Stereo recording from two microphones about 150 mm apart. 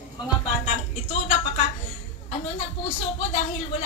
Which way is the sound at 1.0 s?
45° left (ahead or behind).